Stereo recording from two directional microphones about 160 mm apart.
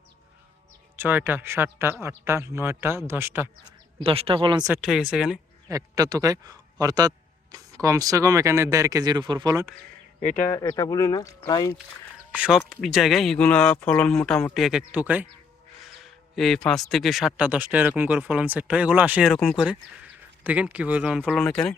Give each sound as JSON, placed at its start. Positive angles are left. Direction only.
{"t": 0.9, "sound": "speech", "side_deg": -15}
{"t": 4.0, "sound": "speech", "side_deg": -35}
{"t": 4.8, "sound": "speech", "side_deg": -5}
{"t": 5.6, "sound": "speech", "side_deg": -20}
{"t": 10.2, "sound": "speech", "side_deg": 55}
{"t": 10.5, "sound": "speech", "side_deg": 25}
{"t": 12.1, "sound": "speech", "side_deg": -5}